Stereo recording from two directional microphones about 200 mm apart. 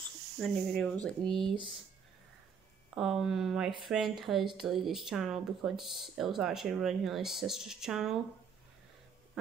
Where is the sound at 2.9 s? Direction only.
Centre (ahead or behind).